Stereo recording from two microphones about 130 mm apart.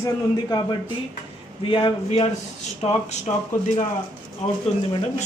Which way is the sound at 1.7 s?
40° left (ahead or behind).